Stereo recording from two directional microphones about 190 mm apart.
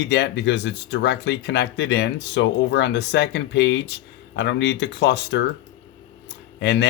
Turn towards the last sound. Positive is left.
turn(degrees=65)  # may be behind; listen again after turning